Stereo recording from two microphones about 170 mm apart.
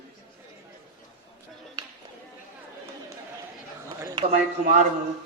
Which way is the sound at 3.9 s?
25° right (ahead or behind).